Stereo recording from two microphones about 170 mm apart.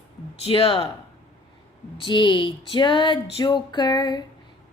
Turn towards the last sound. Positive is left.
turn(degrees=25)  # may be behind; listen again after turning